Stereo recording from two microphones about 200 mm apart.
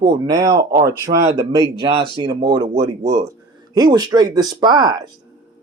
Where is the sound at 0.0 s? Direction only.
20° right (ahead or behind).